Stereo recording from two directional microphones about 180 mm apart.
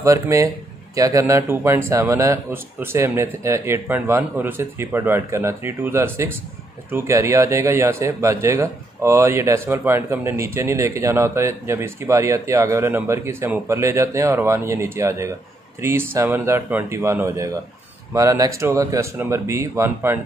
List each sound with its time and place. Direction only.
0.0 s speech: 15° right (ahead or behind)